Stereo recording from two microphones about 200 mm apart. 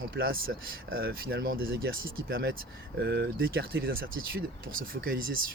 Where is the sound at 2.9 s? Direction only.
55° right (ahead or behind).